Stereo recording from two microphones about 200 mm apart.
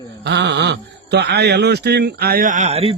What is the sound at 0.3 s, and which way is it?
A man's voice, 60° right (ahead or behind).